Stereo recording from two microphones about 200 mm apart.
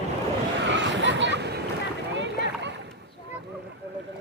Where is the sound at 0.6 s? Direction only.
65° right (ahead or behind).